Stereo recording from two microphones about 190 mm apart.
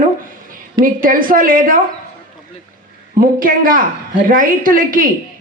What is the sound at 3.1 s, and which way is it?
A woman's voice, 45° right (ahead or behind).